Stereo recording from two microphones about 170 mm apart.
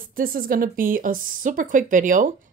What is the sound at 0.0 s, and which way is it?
Speech, 55° right (ahead or behind).